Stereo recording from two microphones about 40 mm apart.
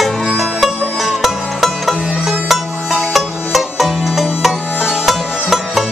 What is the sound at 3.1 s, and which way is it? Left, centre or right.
Music, centre.